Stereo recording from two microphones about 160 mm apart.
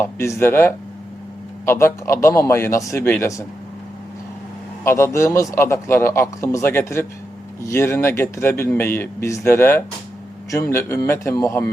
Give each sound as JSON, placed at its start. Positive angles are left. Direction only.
{"t": 0.0, "sound": "a man's voice", "side_deg": 15}
{"t": 4.8, "sound": "a man's voice", "side_deg": 20}